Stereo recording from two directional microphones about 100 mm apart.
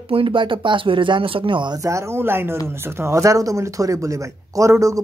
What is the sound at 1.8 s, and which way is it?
Speech, 30° right (ahead or behind).